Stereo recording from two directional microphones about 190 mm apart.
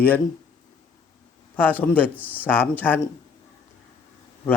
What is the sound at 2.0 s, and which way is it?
Speech, 10° right (ahead or behind).